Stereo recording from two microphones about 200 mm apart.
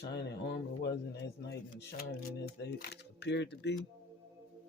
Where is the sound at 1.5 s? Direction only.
50° left (ahead or behind).